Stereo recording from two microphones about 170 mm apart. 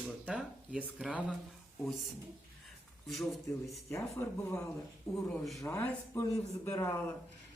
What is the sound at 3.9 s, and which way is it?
Speech, 15° left (ahead or behind).